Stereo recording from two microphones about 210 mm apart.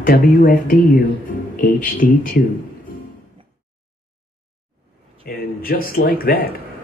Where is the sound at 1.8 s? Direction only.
40° left (ahead or behind).